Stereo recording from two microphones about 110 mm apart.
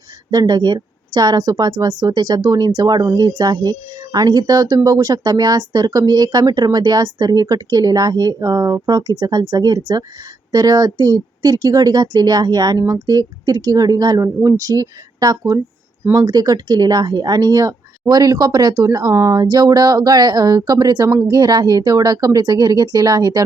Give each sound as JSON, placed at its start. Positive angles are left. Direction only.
{"t": 0.3, "sound": "a woman's voice", "side_deg": -35}